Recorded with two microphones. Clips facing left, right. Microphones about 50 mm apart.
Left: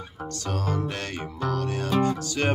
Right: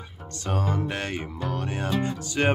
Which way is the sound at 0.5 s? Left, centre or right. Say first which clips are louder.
Right 2 dB; right.